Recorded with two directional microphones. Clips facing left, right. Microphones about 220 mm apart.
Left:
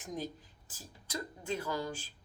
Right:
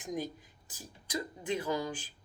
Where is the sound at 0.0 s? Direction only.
15° right (ahead or behind).